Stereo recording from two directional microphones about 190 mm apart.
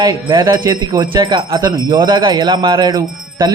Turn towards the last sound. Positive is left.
turn(degrees=-20)  # may be behind; listen again after turning